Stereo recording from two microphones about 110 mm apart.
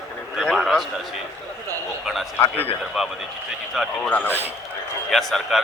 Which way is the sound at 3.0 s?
Centre (ahead or behind).